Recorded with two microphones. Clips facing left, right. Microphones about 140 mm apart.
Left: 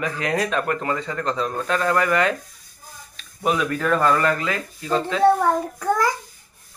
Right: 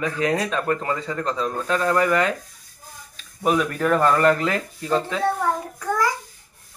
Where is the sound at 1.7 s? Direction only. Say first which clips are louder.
Right 1 dB; 25° right (ahead or behind).